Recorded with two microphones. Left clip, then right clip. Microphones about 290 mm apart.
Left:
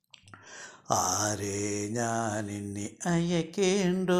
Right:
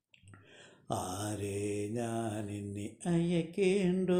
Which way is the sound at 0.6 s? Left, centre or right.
Centre.